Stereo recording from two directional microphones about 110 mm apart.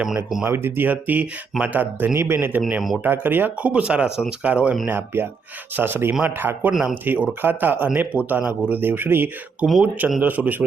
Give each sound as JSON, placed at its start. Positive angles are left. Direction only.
{"t": 0.4, "sound": "speech", "side_deg": -20}